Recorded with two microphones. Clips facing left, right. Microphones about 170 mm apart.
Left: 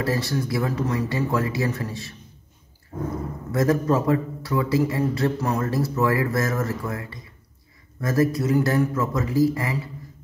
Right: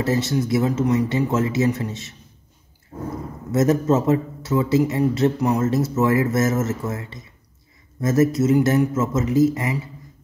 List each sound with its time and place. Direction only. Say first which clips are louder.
0.0 s speech: right 4 dB; 20° right (ahead or behind)
3.5 s speech: right 3 dB; 25° right (ahead or behind)